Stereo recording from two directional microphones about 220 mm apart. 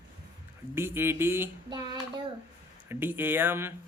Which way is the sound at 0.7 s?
10° right (ahead or behind).